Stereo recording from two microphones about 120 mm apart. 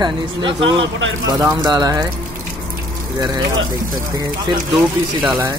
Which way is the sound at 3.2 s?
35° right (ahead or behind).